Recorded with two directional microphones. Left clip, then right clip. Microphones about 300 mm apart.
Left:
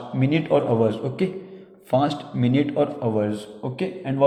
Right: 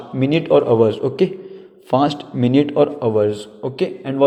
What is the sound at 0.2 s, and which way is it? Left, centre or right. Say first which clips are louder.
A man's voice: right 6 dB; right.